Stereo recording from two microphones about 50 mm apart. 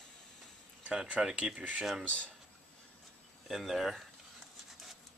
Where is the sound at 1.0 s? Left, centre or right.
Centre.